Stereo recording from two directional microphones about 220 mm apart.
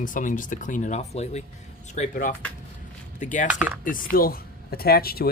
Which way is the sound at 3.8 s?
40° left (ahead or behind).